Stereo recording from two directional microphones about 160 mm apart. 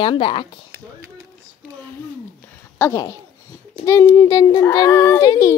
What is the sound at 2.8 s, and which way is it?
A child's voice, 20° left (ahead or behind).